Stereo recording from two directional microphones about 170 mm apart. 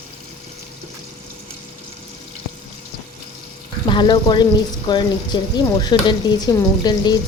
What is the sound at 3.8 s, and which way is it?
Speech, 25° left (ahead or behind).